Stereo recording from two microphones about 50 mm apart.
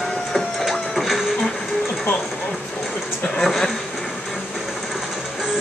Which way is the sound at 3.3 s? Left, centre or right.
Centre.